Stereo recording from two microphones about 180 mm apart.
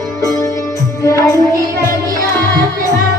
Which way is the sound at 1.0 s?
15° left (ahead or behind).